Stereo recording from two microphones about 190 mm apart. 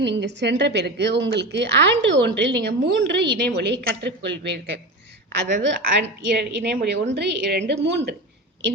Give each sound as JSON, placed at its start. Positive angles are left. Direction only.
{"t": 0.0, "sound": "a woman's voice", "side_deg": -65}
{"t": 5.6, "sound": "a woman's voice", "side_deg": -65}